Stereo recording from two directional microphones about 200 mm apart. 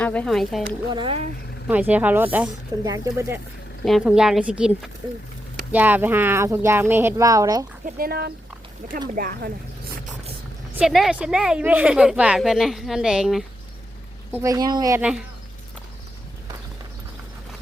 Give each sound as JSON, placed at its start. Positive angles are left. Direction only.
{"t": 0.0, "sound": "speech", "side_deg": 5}
{"t": 0.9, "sound": "speech", "side_deg": -30}
{"t": 1.6, "sound": "speech", "side_deg": -10}
{"t": 3.8, "sound": "speech", "side_deg": 0}
{"t": 7.9, "sound": "speech", "side_deg": -45}
{"t": 10.8, "sound": "speech", "side_deg": 0}
{"t": 14.3, "sound": "speech", "side_deg": -15}